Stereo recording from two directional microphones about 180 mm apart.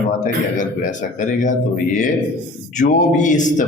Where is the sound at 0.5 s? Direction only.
45° left (ahead or behind).